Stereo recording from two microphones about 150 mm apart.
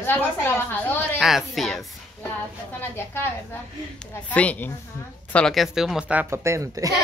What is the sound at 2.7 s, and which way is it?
A woman's voice, 15° left (ahead or behind).